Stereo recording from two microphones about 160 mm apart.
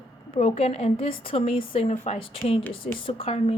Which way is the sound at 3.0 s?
35° left (ahead or behind).